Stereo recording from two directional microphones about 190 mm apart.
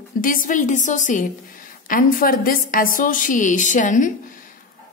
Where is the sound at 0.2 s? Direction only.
45° left (ahead or behind).